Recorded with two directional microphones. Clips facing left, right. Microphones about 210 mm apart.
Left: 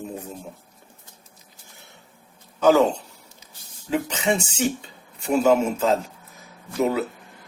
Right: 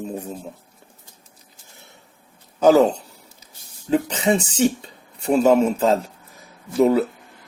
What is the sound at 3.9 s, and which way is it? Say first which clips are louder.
Speech: right 4 dB; 35° right (ahead or behind).